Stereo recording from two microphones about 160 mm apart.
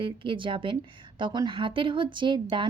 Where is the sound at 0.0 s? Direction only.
30° right (ahead or behind).